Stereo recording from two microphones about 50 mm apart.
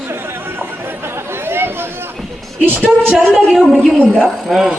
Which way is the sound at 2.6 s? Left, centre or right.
Right.